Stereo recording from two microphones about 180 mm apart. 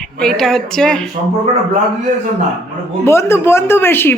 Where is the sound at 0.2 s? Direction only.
5° left (ahead or behind).